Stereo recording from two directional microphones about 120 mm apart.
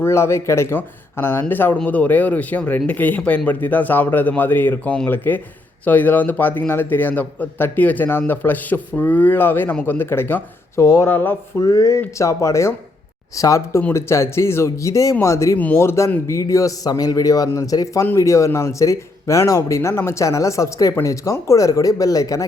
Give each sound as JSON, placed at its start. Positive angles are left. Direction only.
{"t": 0.0, "sound": "speech", "side_deg": 20}
{"t": 11.6, "sound": "a man's voice", "side_deg": 30}